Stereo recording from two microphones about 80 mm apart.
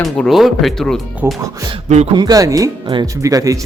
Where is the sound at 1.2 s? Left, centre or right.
Right.